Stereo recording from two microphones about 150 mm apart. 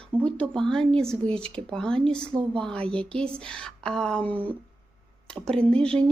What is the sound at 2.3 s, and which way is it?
Speech, 35° right (ahead or behind).